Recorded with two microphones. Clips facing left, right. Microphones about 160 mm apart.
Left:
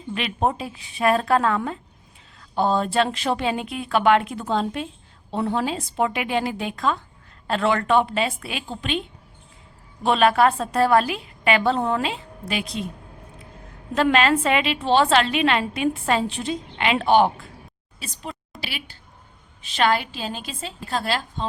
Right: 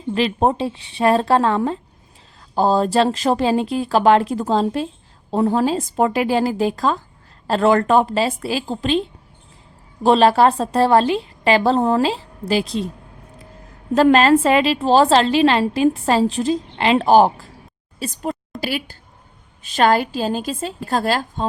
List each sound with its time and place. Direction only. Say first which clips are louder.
0.1 s a woman's voice: right 6 dB; 35° right (ahead or behind)
13.9 s a woman's voice: right 6 dB; 35° right (ahead or behind)